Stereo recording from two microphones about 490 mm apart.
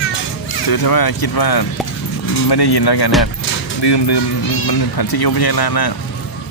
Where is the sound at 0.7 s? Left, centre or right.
Left.